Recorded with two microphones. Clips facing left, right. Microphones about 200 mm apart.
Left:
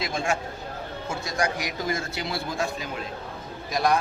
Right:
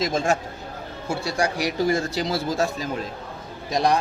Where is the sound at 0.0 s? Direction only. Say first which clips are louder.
Right 5 dB; 40° right (ahead or behind).